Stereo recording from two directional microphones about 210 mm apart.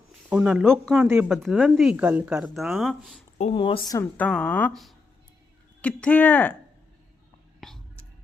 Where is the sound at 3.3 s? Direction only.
30° left (ahead or behind); by 6.6 s 5° left (ahead or behind).